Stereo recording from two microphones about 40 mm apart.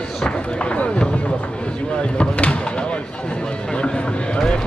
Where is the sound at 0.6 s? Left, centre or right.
Left.